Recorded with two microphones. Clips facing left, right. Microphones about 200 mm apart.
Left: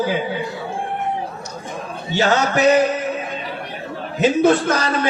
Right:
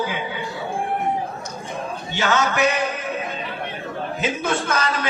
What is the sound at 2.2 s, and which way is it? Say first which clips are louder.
Speech: left 4 dB; 35° left (ahead or behind).